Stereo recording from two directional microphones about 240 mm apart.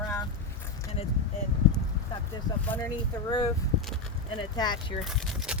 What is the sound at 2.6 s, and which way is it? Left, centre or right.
Speech, centre.